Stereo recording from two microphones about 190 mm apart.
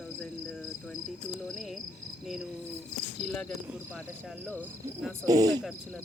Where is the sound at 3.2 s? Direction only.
Centre (ahead or behind).